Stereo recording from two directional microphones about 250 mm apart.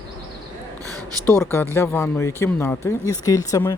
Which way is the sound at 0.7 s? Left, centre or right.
Centre.